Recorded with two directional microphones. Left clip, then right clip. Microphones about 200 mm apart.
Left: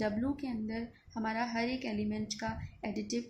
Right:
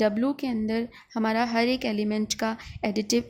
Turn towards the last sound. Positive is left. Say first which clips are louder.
# right 12 dB
turn(degrees=-50)  # may be behind; listen again after turning